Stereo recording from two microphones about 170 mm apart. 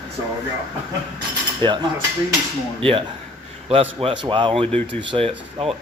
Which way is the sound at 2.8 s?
30° right (ahead or behind).